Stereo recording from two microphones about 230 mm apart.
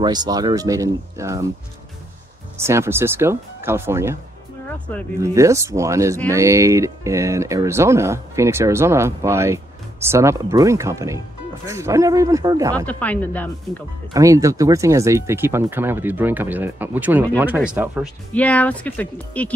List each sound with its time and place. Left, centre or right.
0.0 s speech: centre
2.5 s speech: centre
5.2 s speech: centre
12.7 s speech: centre
14.1 s speech: centre
18.3 s speech: centre